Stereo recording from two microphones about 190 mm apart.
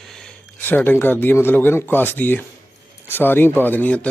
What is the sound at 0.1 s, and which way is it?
Speech, 5° left (ahead or behind).